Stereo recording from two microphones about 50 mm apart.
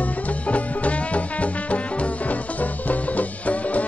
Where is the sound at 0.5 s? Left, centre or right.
Left.